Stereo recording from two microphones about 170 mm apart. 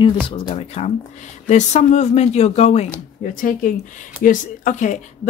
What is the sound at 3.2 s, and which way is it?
Speech, 50° left (ahead or behind).